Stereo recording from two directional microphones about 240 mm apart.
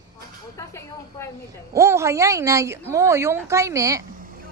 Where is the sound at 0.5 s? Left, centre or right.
Centre.